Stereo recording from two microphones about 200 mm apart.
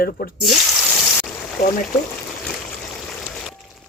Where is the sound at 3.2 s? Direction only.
5° left (ahead or behind).